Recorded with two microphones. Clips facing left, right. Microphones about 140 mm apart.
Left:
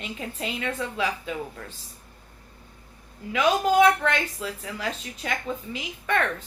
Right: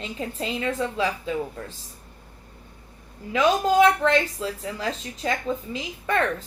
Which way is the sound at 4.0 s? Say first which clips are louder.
Right 5 dB; 30° right (ahead or behind).